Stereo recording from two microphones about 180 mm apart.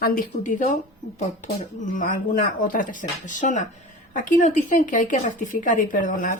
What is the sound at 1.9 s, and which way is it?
A woman's voice, 50° left (ahead or behind).